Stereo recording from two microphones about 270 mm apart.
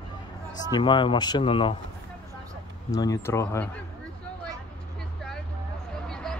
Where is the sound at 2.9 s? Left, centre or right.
Centre.